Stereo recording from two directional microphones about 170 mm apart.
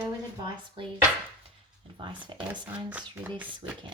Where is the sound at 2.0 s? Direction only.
30° right (ahead or behind).